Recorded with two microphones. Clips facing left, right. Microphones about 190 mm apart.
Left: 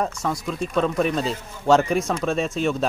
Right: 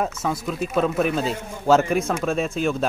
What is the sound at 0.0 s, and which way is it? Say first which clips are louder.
Speech: even; 5° right (ahead or behind).